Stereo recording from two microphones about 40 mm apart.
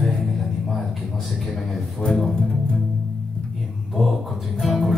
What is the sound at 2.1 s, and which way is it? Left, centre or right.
Music, centre.